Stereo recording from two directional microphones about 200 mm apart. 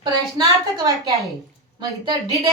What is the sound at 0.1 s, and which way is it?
A woman's voice, 20° right (ahead or behind).